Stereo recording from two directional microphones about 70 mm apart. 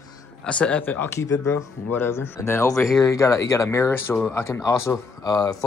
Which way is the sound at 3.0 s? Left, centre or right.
Left.